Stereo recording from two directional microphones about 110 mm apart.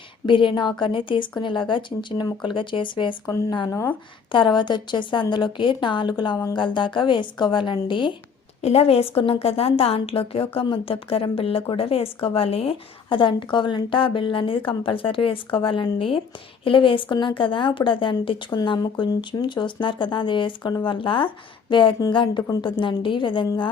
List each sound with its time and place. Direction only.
0.3 s a woman's voice: 50° left (ahead or behind)
8.6 s a woman's voice: 65° left (ahead or behind); by 23.5 s 50° left (ahead or behind)